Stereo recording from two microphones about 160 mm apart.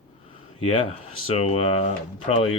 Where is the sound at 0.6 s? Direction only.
35° left (ahead or behind).